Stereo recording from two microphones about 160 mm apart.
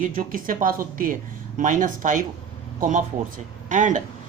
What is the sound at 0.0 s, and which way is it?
Speech, 55° right (ahead or behind).